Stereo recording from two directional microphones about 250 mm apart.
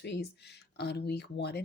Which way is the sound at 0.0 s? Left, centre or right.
Left.